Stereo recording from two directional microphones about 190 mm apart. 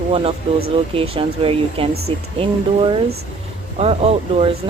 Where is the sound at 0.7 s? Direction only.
30° right (ahead or behind).